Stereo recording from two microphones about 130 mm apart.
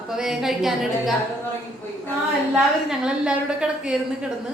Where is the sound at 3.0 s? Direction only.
5° right (ahead or behind).